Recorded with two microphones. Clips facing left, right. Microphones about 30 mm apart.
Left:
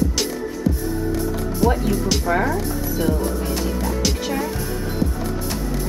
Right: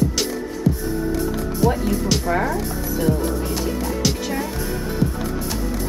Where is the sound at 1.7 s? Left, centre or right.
Centre.